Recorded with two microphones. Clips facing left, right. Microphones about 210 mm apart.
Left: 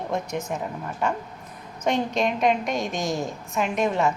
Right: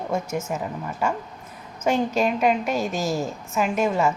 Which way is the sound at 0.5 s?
5° right (ahead or behind).